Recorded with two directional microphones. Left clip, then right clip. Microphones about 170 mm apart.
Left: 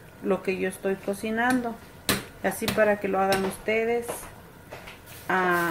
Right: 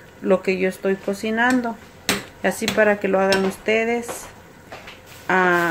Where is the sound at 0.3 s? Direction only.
25° right (ahead or behind).